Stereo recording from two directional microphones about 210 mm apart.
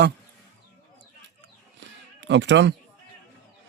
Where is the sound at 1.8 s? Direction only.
60° right (ahead or behind).